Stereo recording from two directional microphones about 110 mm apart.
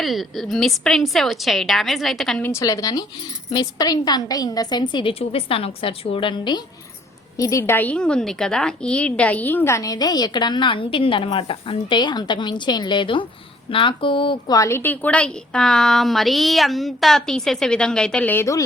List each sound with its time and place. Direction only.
0.0 s a woman's voice: centre (ahead or behind)
2.4 s a woman's voice: 25° left (ahead or behind); by 5.1 s 45° left (ahead or behind)
5.2 s a woman's voice: 60° left (ahead or behind)
7.3 s a woman's voice: 30° left (ahead or behind)
7.8 s a woman's voice: 10° left (ahead or behind); by 14.5 s 50° left (ahead or behind)
14.5 s a woman's voice: 30° left (ahead or behind)
14.8 s a woman's voice: 15° left (ahead or behind)